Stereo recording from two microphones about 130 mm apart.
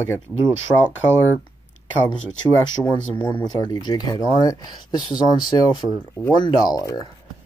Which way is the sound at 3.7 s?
30° left (ahead or behind).